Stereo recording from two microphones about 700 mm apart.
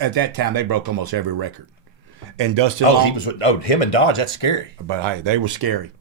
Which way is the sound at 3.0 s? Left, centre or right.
Left.